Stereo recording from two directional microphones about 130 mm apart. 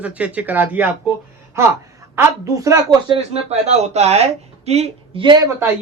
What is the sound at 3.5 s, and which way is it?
A woman's voice, 60° right (ahead or behind).